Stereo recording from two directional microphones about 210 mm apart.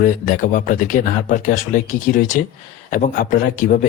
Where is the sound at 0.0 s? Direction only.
40° left (ahead or behind).